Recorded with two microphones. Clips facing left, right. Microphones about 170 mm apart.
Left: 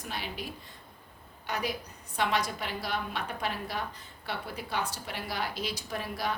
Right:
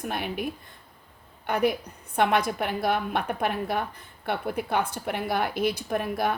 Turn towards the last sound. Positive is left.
turn(degrees=-55)  # may be behind; listen again after turning